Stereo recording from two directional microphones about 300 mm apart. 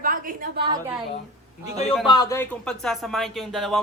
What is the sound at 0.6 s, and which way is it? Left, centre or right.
Speech, centre.